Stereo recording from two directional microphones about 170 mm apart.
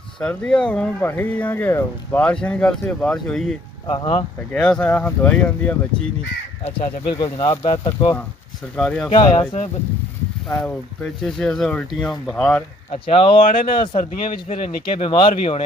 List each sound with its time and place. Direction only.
0.2 s speech: 5° left (ahead or behind)
3.8 s speech: 30° left (ahead or behind)
4.5 s speech: 5° left (ahead or behind)
7.1 s speech: 25° left (ahead or behind)
8.7 s speech: 5° left (ahead or behind)
9.1 s speech: 25° left (ahead or behind)
11.0 s speech: 5° left (ahead or behind)
12.9 s speech: 35° left (ahead or behind)